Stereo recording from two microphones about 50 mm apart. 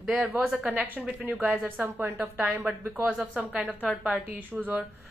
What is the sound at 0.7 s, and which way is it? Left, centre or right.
A woman's voice, right.